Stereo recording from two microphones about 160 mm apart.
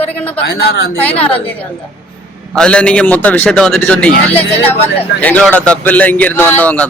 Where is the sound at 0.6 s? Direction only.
90° left.